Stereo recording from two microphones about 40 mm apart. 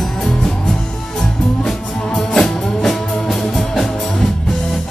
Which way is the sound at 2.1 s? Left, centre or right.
Centre.